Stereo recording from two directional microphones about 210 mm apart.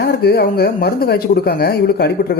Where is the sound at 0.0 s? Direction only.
50° left (ahead or behind).